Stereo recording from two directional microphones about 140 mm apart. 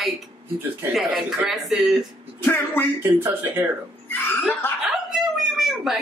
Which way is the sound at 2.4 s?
15° left (ahead or behind).